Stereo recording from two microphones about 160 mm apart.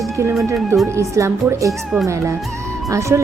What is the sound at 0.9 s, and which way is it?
Speech, 20° right (ahead or behind).